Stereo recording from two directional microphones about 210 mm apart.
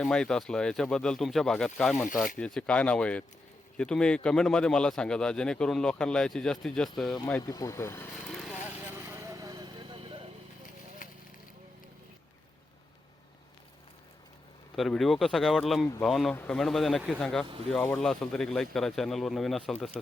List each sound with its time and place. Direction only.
0.0 s speech: 5° left (ahead or behind)
7.4 s speech: 15° left (ahead or behind)
9.0 s vehicle: 15° right (ahead or behind)
11.0 s a sound: 40° left (ahead or behind)
14.8 s speech: centre (ahead or behind)